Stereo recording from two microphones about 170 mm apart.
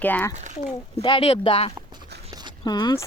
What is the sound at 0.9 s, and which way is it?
A woman's voice, 35° left (ahead or behind).